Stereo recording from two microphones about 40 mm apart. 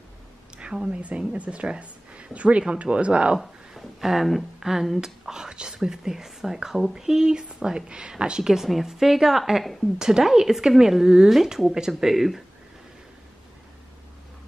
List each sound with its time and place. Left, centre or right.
0.9 s a woman's voice: right
3.3 s speech: centre
5.3 s whispering: centre
5.8 s speech: centre
9.9 s speech: centre